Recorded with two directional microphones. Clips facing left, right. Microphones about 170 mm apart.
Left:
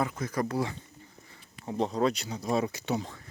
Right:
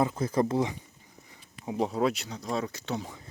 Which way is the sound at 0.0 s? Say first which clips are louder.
Right 4 dB; 25° right (ahead or behind).